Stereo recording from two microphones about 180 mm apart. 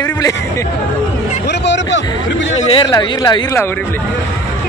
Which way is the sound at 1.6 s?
80° left.